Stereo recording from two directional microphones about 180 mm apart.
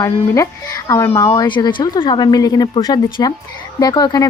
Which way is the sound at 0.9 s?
15° left (ahead or behind).